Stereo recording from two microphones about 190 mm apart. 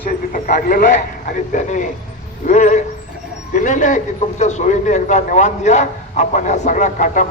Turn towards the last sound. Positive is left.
turn(degrees=40)  # may be behind; listen again after turning